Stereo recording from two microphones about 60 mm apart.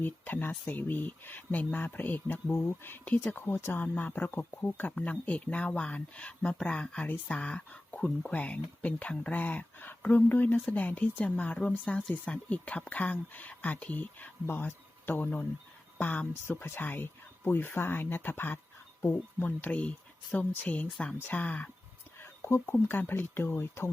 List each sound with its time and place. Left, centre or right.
0.0 s speech: left
4.9 s speech: left
12.5 s speech: left
16.3 s speech: left
19.5 s speech: left
22.2 s speech: left